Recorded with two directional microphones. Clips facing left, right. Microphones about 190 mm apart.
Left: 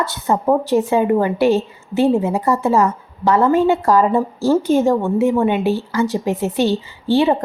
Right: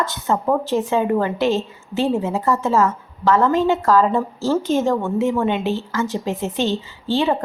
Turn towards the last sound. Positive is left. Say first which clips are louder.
# left 4 dB
turn(degrees=15)  # may be behind; listen again after turning